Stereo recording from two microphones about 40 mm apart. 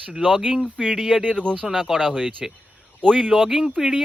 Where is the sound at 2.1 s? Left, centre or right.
Centre.